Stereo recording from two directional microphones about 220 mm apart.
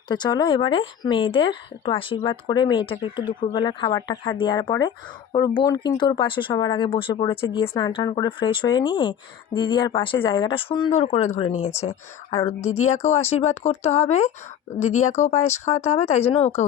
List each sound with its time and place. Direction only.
0.1 s speech: 20° left (ahead or behind)
12.3 s a woman's voice: 15° left (ahead or behind)
12.6 s speech: 30° left (ahead or behind)